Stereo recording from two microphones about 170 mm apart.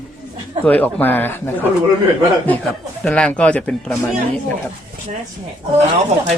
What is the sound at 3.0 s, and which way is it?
Speech, 5° left (ahead or behind).